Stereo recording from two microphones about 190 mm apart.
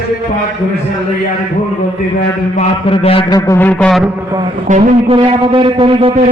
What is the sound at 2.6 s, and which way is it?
A man's voice, 30° left (ahead or behind).